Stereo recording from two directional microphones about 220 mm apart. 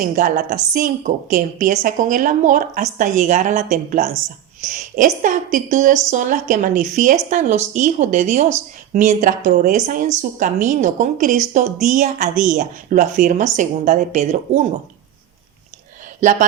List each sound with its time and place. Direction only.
0.0 s a woman's voice: 35° right (ahead or behind)
16.2 s a woman's voice: 35° right (ahead or behind)